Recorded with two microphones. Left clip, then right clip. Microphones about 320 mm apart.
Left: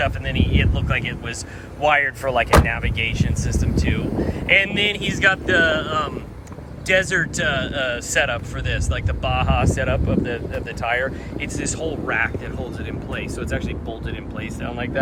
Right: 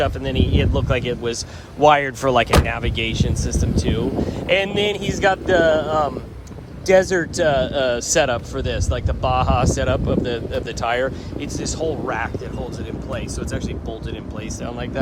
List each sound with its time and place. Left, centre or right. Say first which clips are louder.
0.0 s speech: right 2 dB; centre